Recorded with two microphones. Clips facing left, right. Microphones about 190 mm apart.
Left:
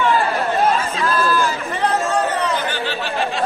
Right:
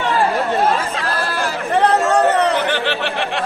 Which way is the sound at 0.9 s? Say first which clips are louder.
Left 3 dB; 70° right (ahead or behind).